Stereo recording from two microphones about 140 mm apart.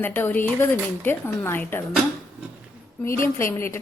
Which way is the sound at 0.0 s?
15° left (ahead or behind).